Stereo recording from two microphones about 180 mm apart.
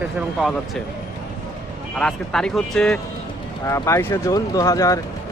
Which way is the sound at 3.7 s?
15° left (ahead or behind).